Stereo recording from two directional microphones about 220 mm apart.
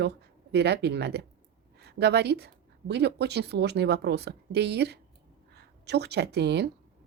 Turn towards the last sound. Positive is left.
turn(degrees=-50)  # may be behind; listen again after turning